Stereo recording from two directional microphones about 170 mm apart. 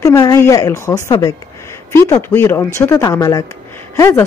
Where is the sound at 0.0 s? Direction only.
20° left (ahead or behind).